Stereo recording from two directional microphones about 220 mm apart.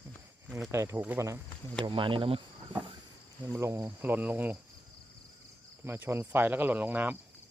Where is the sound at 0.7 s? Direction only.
10° right (ahead or behind).